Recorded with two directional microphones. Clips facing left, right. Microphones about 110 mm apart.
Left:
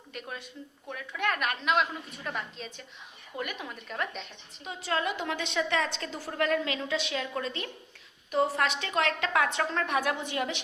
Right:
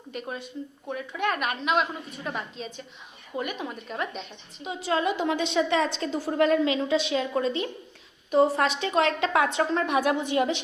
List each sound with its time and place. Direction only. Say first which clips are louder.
0.1 s a woman's voice: right 6 dB; 25° right (ahead or behind)